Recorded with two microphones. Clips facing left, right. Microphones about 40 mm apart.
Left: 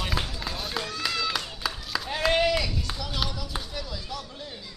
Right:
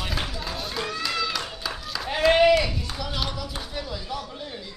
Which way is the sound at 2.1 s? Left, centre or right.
Centre.